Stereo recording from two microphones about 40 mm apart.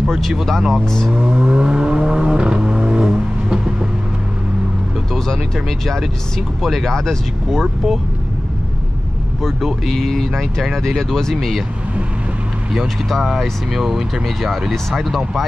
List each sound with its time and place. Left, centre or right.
0.0 s speech: centre
0.8 s speech: centre
1.1 s vehicle: right
5.1 s speech: centre
6.6 s speech: centre
9.8 s speech: centre
11.3 s speech: centre
12.7 s speech: centre
14.2 s speech: centre